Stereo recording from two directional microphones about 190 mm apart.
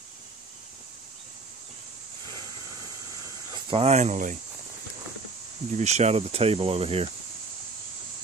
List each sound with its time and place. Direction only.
3.7 s speech: 35° right (ahead or behind)
5.8 s speech: 35° right (ahead or behind)